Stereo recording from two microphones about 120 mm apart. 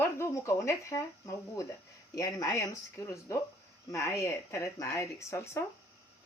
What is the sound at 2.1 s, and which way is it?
Speech, 25° left (ahead or behind).